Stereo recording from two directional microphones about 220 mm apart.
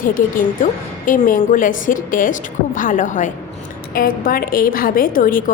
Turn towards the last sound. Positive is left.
turn(degrees=40)  # may be behind; listen again after turning